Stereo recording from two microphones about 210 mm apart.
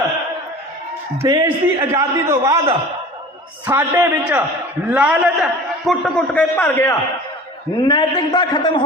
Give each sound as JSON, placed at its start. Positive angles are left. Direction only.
{"t": 1.2, "sound": "a man's voice", "side_deg": -15}
{"t": 3.7, "sound": "a man's voice", "side_deg": -10}